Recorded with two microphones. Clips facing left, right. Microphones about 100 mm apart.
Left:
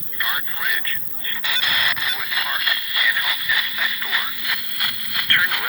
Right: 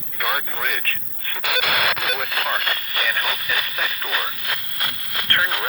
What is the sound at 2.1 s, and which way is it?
Speech, 45° right (ahead or behind).